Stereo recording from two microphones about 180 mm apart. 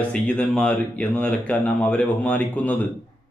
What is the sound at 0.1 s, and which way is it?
Speech, 5° left (ahead or behind).